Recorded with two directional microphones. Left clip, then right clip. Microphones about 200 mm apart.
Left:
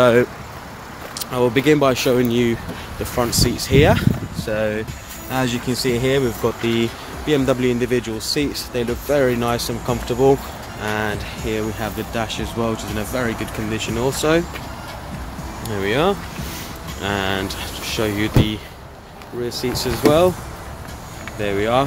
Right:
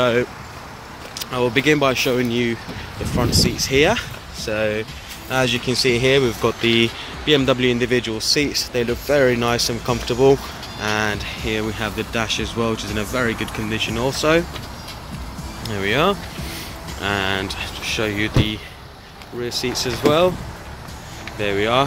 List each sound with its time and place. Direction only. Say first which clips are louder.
0.0 s speech: left 4 dB; 25° left (ahead or behind)
1.3 s speech: left 1 dB; 15° left (ahead or behind)
3.7 s speech: left 1 dB; 10° left (ahead or behind)
4.5 s speech: even; 5° right (ahead or behind)
15.7 s speech: even; 5° left (ahead or behind)
21.4 s speech: even; centre (ahead or behind)